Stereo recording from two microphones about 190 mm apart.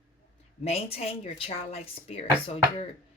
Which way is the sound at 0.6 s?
30° left (ahead or behind).